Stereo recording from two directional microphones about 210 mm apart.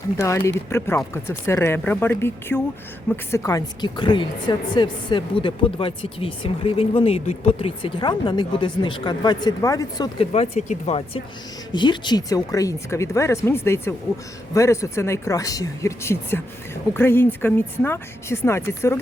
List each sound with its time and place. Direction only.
0.2 s a woman's voice: 15° left (ahead or behind)